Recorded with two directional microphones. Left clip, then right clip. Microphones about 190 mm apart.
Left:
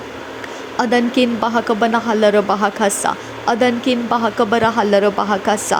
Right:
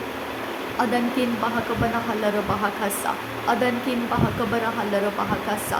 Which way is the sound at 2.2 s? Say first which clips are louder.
Left 11 dB; 40° left (ahead or behind).